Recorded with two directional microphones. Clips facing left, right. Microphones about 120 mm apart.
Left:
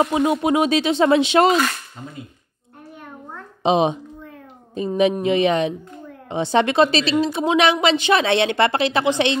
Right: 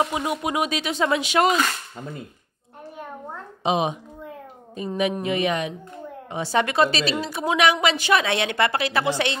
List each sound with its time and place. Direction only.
0.0 s a woman's voice: 25° left (ahead or behind)
3.6 s a woman's voice: 30° left (ahead or behind)